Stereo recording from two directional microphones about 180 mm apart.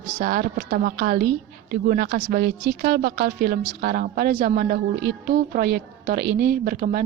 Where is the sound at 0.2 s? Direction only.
60° right (ahead or behind).